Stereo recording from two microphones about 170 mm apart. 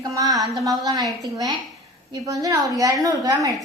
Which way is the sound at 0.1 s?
20° right (ahead or behind).